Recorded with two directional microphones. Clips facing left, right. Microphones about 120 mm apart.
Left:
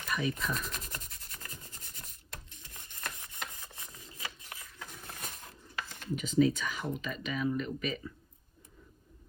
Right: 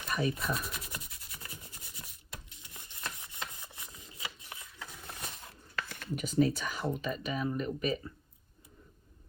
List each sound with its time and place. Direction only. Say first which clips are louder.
0.1 s speech: right 1 dB; 40° right (ahead or behind)
0.5 s rub: right 1 dB; 10° right (ahead or behind)
4.8 s a sound: right 1 dB; 10° right (ahead or behind)
5.9 s speech: left 3 dB; 45° right (ahead or behind)